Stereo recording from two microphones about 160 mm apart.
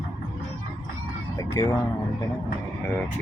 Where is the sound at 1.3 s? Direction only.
20° left (ahead or behind).